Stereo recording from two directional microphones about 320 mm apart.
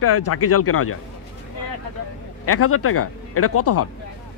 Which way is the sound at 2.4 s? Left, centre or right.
Left.